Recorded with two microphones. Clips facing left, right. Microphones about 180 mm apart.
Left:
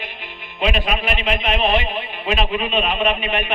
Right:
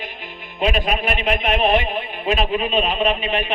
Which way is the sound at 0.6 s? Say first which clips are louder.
Right 1 dB; 40° right (ahead or behind).